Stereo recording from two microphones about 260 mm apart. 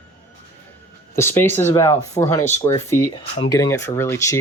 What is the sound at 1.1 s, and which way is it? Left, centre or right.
Speech, centre.